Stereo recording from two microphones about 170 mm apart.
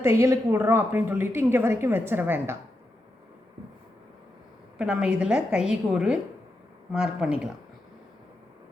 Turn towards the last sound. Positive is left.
turn(degrees=-5)  # may be behind; listen again after turning